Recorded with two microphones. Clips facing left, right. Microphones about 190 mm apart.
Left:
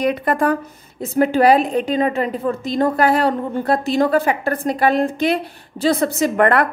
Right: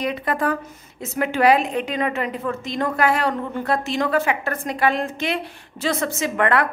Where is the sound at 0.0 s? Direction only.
45° left (ahead or behind).